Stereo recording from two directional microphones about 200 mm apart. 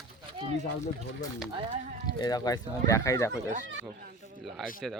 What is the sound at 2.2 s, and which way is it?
Speech, 20° left (ahead or behind).